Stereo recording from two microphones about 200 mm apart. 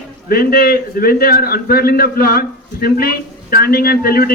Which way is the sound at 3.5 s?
50° left (ahead or behind).